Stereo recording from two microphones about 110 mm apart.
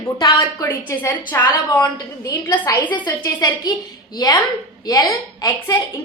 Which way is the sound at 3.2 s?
35° left (ahead or behind).